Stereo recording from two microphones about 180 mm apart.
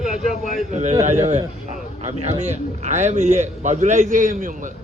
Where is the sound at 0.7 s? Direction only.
40° right (ahead or behind).